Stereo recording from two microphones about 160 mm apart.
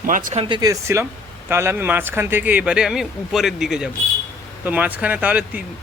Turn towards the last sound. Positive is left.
turn(degrees=-10)  # may be behind; listen again after turning